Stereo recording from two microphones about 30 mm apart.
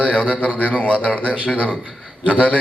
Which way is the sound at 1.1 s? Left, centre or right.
Right.